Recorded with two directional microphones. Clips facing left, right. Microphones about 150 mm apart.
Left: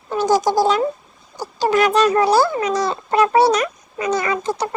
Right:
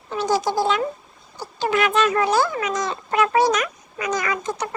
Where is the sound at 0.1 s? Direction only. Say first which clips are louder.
Left 5 dB; 45° left (ahead or behind).